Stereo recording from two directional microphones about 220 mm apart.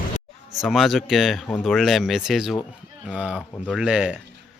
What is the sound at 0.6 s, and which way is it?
Speech, centre (ahead or behind).